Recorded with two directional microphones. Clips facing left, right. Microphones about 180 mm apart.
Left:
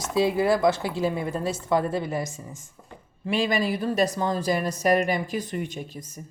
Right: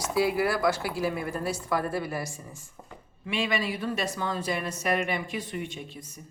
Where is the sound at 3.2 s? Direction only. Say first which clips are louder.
Left 5 dB; 40° left (ahead or behind).